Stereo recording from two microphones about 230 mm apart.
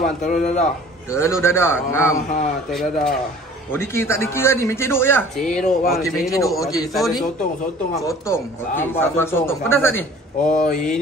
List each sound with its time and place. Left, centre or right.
0.0 s a man's voice: left
1.1 s a man's voice: centre
6.6 s a man's voice: centre
6.9 s speech: centre
8.0 s a man's voice: centre
10.4 s a man's voice: left